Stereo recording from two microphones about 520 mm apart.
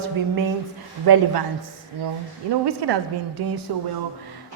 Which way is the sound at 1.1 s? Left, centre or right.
Right.